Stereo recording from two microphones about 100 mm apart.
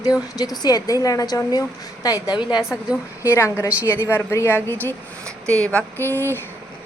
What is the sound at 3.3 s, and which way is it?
A woman's voice, 30° left (ahead or behind).